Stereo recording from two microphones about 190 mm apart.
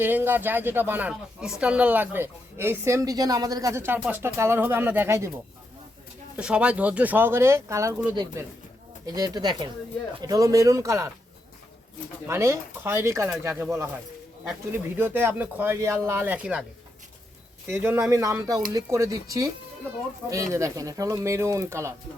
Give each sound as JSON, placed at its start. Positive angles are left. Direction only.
{"t": 0.0, "sound": "speech", "side_deg": -10}
{"t": 6.3, "sound": "speech", "side_deg": -5}
{"t": 12.3, "sound": "speech", "side_deg": -15}
{"t": 17.7, "sound": "speech", "side_deg": -15}